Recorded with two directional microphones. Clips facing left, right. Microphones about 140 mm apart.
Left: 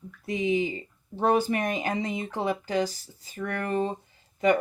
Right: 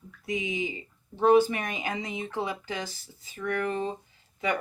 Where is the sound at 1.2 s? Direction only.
40° left (ahead or behind).